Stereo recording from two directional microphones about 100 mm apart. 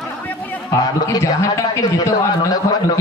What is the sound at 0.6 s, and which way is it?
A man's voice, 35° left (ahead or behind).